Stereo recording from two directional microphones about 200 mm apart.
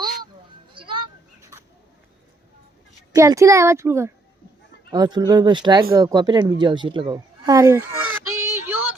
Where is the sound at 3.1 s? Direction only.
15° right (ahead or behind).